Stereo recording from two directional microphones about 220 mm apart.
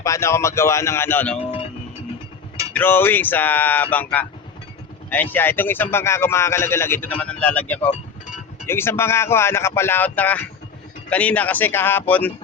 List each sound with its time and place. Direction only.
0.0 s a man's voice: 15° left (ahead or behind)
1.4 s speech: 25° left (ahead or behind)
2.7 s a man's voice: 10° left (ahead or behind)